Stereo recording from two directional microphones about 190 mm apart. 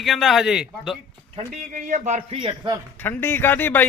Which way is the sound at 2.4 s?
25° right (ahead or behind).